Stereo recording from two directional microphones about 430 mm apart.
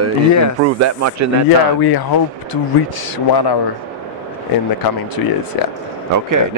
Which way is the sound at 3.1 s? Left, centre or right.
Left.